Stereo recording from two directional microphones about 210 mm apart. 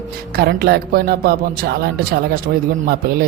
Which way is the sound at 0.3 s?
50° right (ahead or behind).